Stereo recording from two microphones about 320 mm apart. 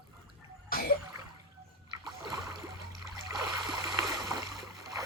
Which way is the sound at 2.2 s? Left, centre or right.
Left.